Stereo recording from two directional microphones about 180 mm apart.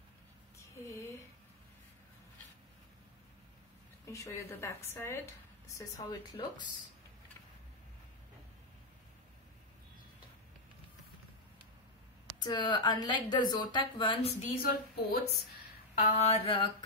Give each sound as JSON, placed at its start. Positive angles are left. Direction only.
{"t": 0.8, "sound": "a sound", "side_deg": 15}
{"t": 4.0, "sound": "a woman's voice", "side_deg": 15}
{"t": 12.4, "sound": "a woman's voice", "side_deg": 25}
{"t": 14.4, "sound": "a woman's voice", "side_deg": 55}
{"t": 15.9, "sound": "speech", "side_deg": 40}